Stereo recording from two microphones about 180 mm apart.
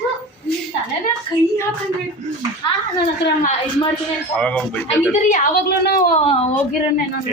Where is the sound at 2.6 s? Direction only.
25° left (ahead or behind).